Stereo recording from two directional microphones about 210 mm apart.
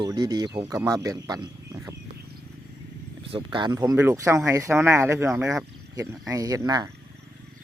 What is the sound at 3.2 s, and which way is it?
Speech, 25° right (ahead or behind).